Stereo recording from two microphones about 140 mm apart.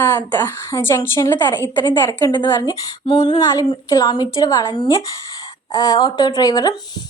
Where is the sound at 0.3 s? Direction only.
15° left (ahead or behind).